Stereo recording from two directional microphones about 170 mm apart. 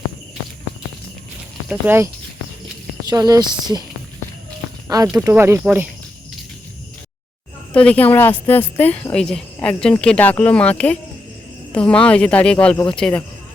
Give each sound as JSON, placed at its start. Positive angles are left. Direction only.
{"t": 1.6, "sound": "speech", "side_deg": -10}
{"t": 3.1, "sound": "speech", "side_deg": -25}
{"t": 4.9, "sound": "speech", "side_deg": -20}
{"t": 7.7, "sound": "a woman's voice", "side_deg": 10}